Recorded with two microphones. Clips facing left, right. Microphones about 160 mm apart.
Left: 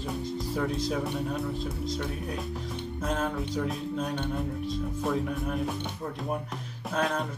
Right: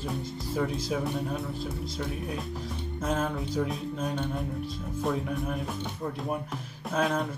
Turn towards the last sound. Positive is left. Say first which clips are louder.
# right 1 dB
turn(degrees=0)  # may be behind; listen again after turning